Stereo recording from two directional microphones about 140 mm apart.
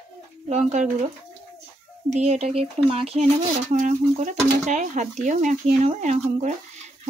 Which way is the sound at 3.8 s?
65° right (ahead or behind).